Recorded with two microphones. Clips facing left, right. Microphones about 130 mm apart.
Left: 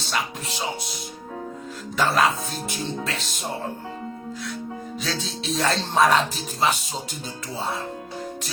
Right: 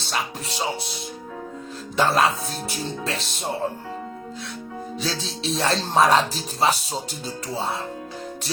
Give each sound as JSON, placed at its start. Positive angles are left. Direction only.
{"t": 0.0, "sound": "speech", "side_deg": -35}
{"t": 2.0, "sound": "speech", "side_deg": -30}
{"t": 5.0, "sound": "speech", "side_deg": -35}